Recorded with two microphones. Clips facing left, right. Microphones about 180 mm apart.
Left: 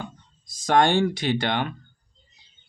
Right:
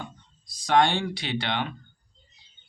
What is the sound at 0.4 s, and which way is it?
Speech, 45° left (ahead or behind).